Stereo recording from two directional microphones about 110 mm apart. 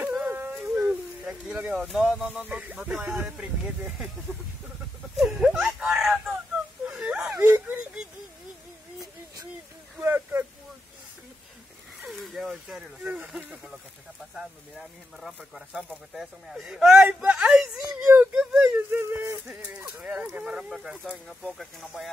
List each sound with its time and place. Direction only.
0.0 s a sound: 15° right (ahead or behind)
1.9 s a man's voice: 5° right (ahead or behind)
5.2 s a sound: centre (ahead or behind)
6.9 s whimper: 10° right (ahead or behind)
9.9 s speech: 15° right (ahead or behind)
12.0 s speech: centre (ahead or behind)
14.8 s a man's voice: centre (ahead or behind)
18.9 s speech: 20° right (ahead or behind)
19.5 s a man's voice: 10° right (ahead or behind)